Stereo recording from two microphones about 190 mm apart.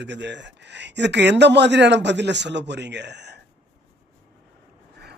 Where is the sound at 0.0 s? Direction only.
65° right (ahead or behind).